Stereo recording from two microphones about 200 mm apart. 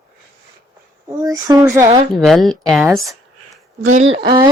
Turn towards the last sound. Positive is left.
turn(degrees=-30)  # may be behind; listen again after turning